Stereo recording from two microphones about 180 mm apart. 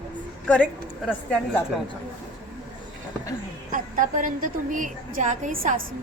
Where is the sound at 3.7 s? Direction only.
50° right (ahead or behind).